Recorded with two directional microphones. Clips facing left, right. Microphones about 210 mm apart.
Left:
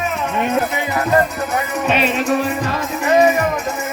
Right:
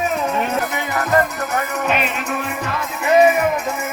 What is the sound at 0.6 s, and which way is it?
Music, 30° left (ahead or behind).